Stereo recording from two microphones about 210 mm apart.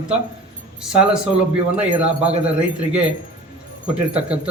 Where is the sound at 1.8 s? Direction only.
5° right (ahead or behind).